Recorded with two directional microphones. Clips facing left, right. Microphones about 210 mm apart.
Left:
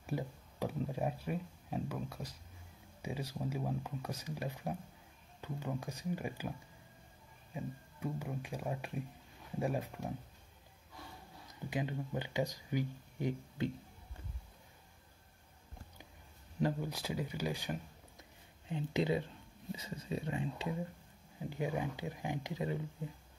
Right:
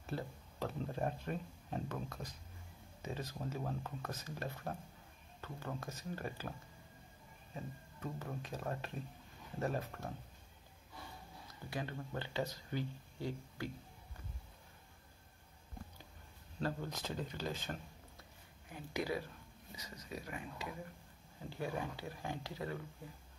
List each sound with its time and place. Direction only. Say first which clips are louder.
0.0 s speech: left 3 dB; 10° left (ahead or behind)
7.5 s speech: left 4 dB; 10° left (ahead or behind)
11.7 s speech: left 4 dB; 15° left (ahead or behind)
16.5 s speech: left 5 dB; 15° left (ahead or behind)
18.7 s speech: left 6 dB; 25° left (ahead or behind)
21.4 s speech: left 4 dB; 15° left (ahead or behind)